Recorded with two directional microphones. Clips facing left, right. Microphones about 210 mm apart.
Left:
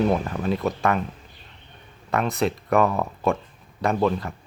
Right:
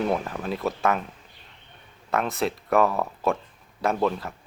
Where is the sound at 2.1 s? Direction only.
Centre (ahead or behind).